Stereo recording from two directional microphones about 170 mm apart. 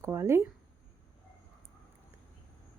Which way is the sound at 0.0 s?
15° right (ahead or behind).